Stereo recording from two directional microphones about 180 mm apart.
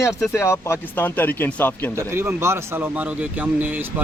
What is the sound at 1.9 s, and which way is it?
A man's voice, 15° right (ahead or behind).